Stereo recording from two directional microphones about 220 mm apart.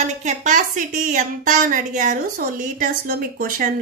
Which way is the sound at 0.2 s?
35° right (ahead or behind).